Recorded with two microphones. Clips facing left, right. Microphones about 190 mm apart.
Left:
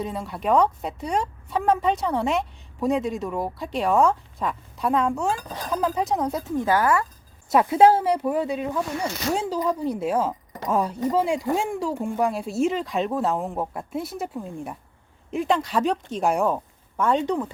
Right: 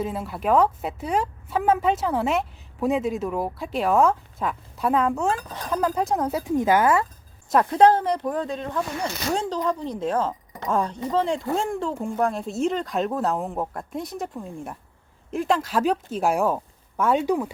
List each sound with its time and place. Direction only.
0.0 s a woman's voice: 5° right (ahead or behind)
6.4 s speech: 20° right (ahead or behind)
7.5 s a woman's voice: 5° left (ahead or behind)